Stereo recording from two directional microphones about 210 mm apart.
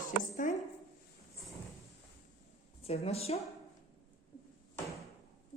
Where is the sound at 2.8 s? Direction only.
30° left (ahead or behind).